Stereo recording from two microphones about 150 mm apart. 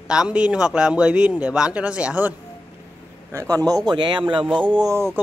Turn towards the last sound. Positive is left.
turn(degrees=-20)  # may be behind; listen again after turning